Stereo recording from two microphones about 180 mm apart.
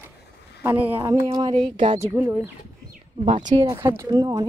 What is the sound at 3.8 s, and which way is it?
Speech, 15° right (ahead or behind).